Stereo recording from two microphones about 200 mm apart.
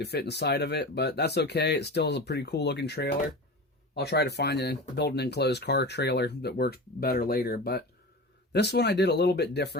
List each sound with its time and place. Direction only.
0.0 s speech: 55° left (ahead or behind)